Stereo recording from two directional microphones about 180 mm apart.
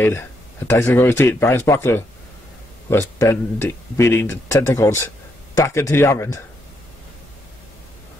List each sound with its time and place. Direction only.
0.0 s speech: 10° left (ahead or behind)